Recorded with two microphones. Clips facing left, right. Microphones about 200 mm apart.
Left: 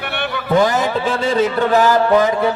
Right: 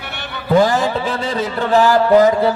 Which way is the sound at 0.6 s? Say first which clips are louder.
Even; 20° left (ahead or behind).